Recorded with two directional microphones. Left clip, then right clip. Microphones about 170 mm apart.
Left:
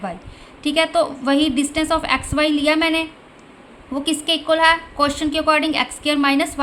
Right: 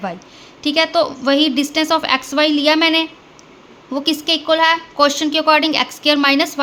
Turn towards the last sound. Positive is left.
turn(degrees=-20)  # may be behind; listen again after turning